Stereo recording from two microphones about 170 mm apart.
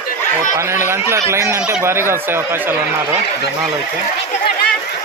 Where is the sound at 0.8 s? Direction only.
15° right (ahead or behind).